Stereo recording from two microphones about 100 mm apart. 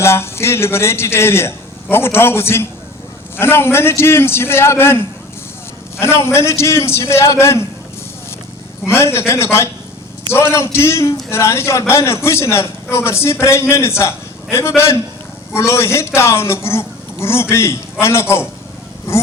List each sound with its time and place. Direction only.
0.0 s a man's voice: 25° left (ahead or behind)
8.9 s a man's voice: 25° left (ahead or behind)